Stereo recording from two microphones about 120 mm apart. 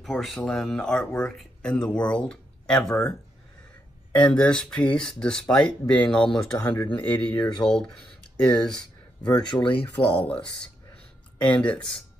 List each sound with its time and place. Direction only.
0.0 s speech: centre (ahead or behind)
4.1 s speech: 10° left (ahead or behind)
9.5 s speech: 45° left (ahead or behind)
10.0 s speech: 10° left (ahead or behind)